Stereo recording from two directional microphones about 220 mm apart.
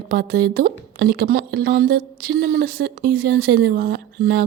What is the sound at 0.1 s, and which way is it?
A woman's voice, 45° right (ahead or behind).